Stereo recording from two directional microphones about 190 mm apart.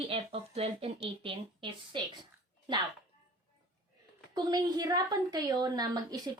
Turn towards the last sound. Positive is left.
turn(degrees=-20)  # may be behind; listen again after turning